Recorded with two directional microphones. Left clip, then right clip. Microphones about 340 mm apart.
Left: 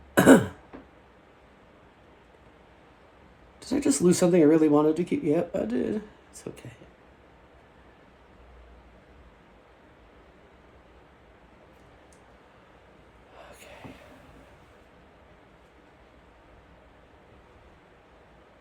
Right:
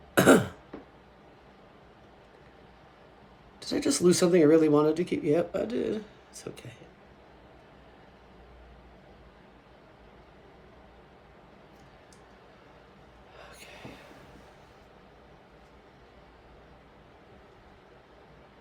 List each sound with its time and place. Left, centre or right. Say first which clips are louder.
0.1 s cough: left 3 dB; centre
3.6 s speech: left 1 dB; centre